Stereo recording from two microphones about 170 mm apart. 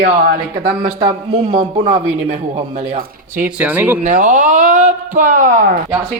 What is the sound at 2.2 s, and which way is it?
Speech, 50° right (ahead or behind).